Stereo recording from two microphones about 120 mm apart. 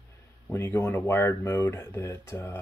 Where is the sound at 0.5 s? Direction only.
20° left (ahead or behind).